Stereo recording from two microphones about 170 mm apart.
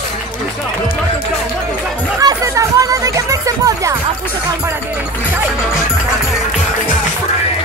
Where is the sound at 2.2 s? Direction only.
20° right (ahead or behind).